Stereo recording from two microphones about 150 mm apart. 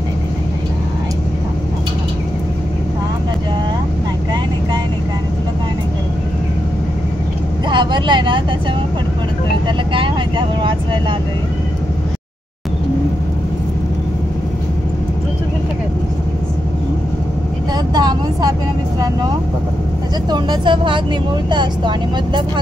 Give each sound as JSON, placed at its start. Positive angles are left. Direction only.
{"t": 7.7, "sound": "vehicle", "side_deg": -30}
{"t": 17.9, "sound": "vehicle", "side_deg": -25}
{"t": 20.2, "sound": "speech", "side_deg": -30}